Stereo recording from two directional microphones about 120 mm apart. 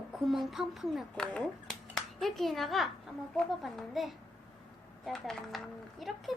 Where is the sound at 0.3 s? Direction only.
Centre (ahead or behind).